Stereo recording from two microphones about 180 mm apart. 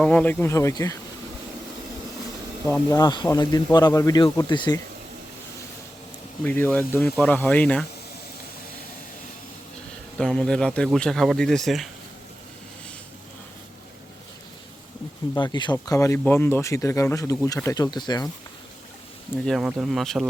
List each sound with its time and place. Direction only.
0.0 s speech: 10° left (ahead or behind)
2.9 s a man's voice: 25° left (ahead or behind)
6.4 s speech: 10° left (ahead or behind)
10.2 s speech: 5° left (ahead or behind)
15.4 s speech: 25° left (ahead or behind)
19.5 s speech: centre (ahead or behind)